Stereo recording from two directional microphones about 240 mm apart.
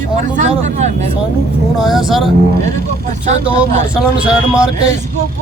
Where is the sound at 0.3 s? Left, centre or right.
Right.